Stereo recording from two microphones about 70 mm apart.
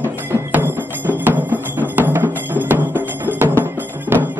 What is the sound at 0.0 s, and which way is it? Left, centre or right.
Music, right.